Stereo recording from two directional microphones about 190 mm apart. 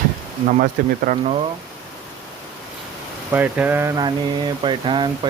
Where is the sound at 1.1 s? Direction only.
45° right (ahead or behind).